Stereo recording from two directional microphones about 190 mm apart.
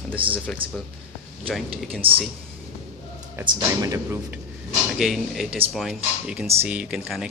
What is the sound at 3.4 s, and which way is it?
Speech, 15° right (ahead or behind).